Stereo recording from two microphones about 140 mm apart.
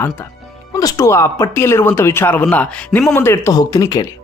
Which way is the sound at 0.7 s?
25° left (ahead or behind).